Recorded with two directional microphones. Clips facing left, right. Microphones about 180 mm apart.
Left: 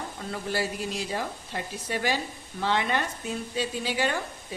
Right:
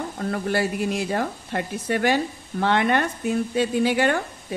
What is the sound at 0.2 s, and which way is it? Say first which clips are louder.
Speech: right 7 dB; 60° right (ahead or behind).